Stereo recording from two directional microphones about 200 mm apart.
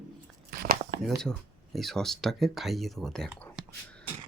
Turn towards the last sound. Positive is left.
turn(degrees=5)  # may be behind; listen again after turning